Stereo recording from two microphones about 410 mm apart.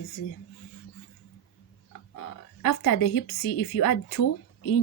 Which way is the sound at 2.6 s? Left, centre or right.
Left.